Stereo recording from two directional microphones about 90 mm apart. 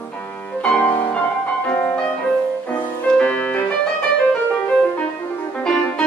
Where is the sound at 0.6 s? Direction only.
15° left (ahead or behind).